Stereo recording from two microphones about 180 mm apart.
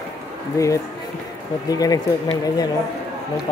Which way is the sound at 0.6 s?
20° left (ahead or behind).